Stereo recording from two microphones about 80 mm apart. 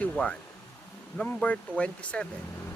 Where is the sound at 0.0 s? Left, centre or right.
Centre.